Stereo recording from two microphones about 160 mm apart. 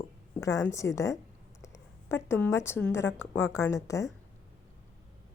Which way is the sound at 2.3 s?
15° left (ahead or behind).